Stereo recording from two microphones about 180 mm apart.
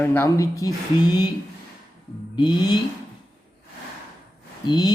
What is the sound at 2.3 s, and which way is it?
Speech, 25° left (ahead or behind).